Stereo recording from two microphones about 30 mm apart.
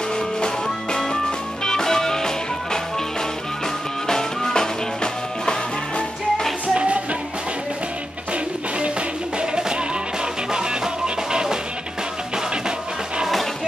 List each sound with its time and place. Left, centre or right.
0.7 s music: centre
4.1 s music: centre
5.0 s music: left
6.7 s music: right
9.4 s music: right